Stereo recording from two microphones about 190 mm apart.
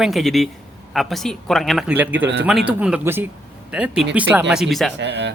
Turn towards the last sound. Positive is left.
turn(degrees=-65)  # may be behind; listen again after turning